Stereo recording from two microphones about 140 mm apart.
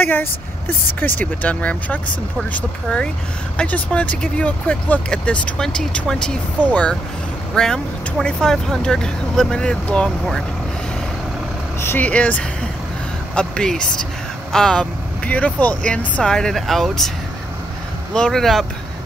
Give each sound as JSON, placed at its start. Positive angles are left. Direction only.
{"t": 0.0, "sound": "speech", "side_deg": 15}
{"t": 11.8, "sound": "speech", "side_deg": 15}
{"t": 18.1, "sound": "speech", "side_deg": 5}